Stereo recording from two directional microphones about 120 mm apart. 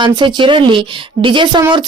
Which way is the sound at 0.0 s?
40° right (ahead or behind).